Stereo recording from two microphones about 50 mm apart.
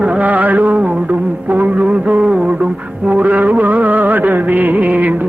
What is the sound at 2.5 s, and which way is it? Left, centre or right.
Music, right.